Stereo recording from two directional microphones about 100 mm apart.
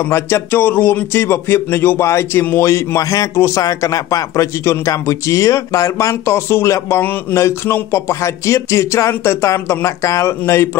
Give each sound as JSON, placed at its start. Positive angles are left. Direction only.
{"t": 0.0, "sound": "speech", "side_deg": 25}